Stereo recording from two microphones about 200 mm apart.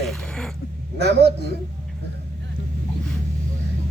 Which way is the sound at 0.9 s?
55° right (ahead or behind).